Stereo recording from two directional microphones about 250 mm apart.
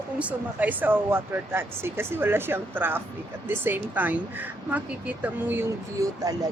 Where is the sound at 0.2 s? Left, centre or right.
Centre.